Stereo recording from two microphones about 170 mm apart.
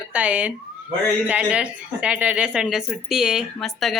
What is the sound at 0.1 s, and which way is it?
Speech, 10° right (ahead or behind).